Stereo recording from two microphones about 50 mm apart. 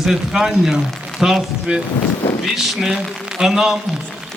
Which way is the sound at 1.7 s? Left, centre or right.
Right.